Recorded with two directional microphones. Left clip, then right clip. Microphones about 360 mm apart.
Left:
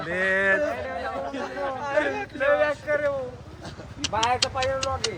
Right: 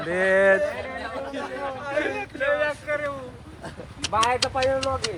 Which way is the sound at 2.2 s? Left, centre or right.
Left.